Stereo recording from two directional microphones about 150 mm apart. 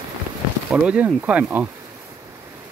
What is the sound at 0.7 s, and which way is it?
Speech, 10° right (ahead or behind).